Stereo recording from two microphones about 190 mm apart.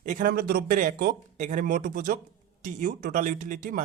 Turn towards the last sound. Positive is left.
turn(degrees=-45)  # may be behind; listen again after turning